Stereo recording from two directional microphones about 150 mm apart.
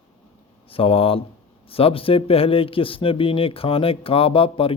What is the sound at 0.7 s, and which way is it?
Speech, 40° left (ahead or behind).